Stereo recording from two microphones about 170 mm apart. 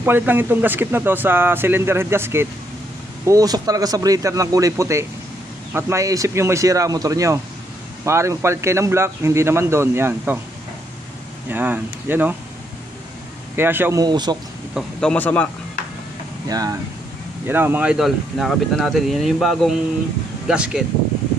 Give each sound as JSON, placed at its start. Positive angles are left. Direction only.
{"t": 0.0, "sound": "speech", "side_deg": -10}
{"t": 11.4, "sound": "speech", "side_deg": -10}
{"t": 13.6, "sound": "speech", "side_deg": -10}
{"t": 14.0, "sound": "speech", "side_deg": -25}
{"t": 14.7, "sound": "speech", "side_deg": 0}
{"t": 16.4, "sound": "speech", "side_deg": -20}